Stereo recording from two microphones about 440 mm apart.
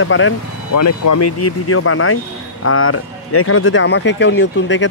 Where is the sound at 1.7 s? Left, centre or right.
Left.